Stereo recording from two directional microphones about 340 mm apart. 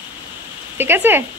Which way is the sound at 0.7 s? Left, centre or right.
Centre.